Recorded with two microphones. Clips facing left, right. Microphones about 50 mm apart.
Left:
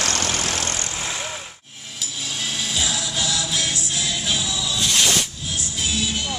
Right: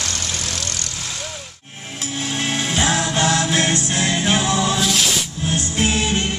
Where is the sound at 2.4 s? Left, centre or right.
Right.